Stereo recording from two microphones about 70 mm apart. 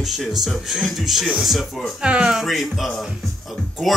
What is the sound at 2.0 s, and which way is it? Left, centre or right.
Speech, centre.